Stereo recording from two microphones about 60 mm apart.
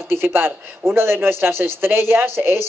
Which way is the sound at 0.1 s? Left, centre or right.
Right.